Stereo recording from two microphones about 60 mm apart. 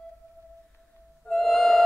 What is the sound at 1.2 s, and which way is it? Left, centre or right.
Music, centre.